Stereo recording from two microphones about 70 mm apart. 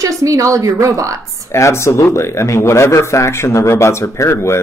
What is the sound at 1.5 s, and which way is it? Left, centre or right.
Speech, left.